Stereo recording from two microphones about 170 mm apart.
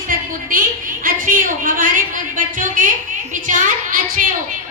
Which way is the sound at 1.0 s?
55° right (ahead or behind).